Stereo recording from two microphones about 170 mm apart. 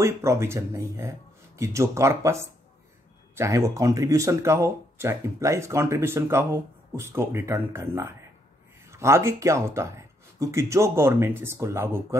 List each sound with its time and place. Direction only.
0.0 s speech: 15° right (ahead or behind)
3.3 s speech: 15° right (ahead or behind)